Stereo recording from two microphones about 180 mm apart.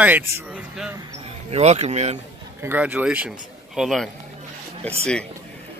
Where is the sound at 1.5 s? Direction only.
35° right (ahead or behind).